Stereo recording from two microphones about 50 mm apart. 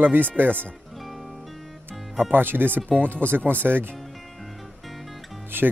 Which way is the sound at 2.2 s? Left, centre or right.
Right.